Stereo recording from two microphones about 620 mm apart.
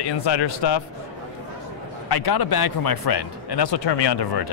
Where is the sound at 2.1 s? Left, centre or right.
Left.